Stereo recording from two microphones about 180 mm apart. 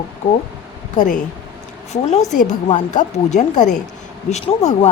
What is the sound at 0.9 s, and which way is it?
A woman's voice, 45° left (ahead or behind).